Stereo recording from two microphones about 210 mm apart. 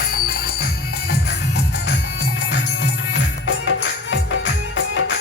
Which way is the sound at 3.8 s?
55° left (ahead or behind).